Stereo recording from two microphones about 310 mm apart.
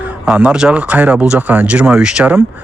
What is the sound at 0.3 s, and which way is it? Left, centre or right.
Speech, centre.